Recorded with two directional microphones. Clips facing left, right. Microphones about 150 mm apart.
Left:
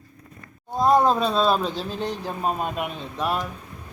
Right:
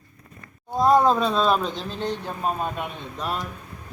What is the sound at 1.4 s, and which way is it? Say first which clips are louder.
Speech: left 1 dB; 5° left (ahead or behind).